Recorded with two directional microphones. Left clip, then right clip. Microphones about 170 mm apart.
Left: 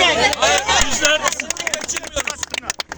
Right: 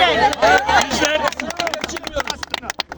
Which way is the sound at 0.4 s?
10° right (ahead or behind).